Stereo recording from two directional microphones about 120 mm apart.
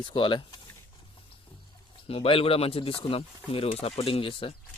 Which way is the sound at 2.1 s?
50° left (ahead or behind).